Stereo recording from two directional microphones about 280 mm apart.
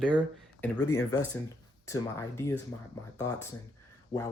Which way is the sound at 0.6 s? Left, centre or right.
Centre.